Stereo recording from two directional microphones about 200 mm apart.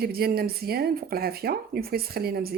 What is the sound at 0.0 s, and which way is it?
Speech, 50° right (ahead or behind).